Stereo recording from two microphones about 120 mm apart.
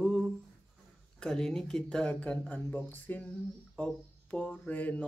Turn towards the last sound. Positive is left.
turn(degrees=10)  # may be behind; listen again after turning